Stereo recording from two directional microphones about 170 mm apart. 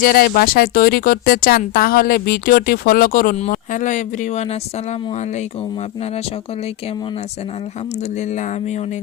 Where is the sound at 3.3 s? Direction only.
45° left (ahead or behind).